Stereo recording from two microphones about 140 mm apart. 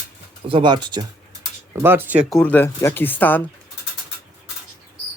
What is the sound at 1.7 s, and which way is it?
Speech, 15° right (ahead or behind).